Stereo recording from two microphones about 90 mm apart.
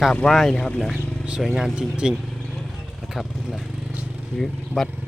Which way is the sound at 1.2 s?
10° right (ahead or behind).